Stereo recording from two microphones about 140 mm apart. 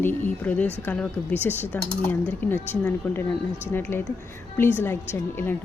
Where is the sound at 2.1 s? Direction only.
15° left (ahead or behind).